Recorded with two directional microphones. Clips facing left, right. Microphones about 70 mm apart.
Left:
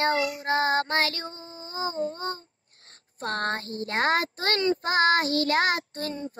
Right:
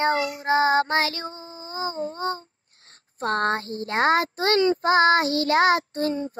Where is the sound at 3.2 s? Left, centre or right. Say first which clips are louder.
Right 5 dB; right.